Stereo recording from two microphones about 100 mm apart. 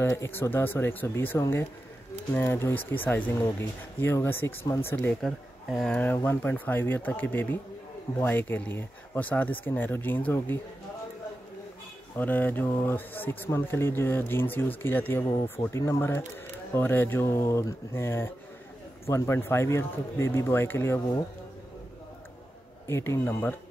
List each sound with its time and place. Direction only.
0.0 s speech: 25° left (ahead or behind)
5.2 s speech: 5° left (ahead or behind)
6.1 s speech: 20° left (ahead or behind)
12.2 s speech: 15° left (ahead or behind)
22.8 s speech: 25° left (ahead or behind)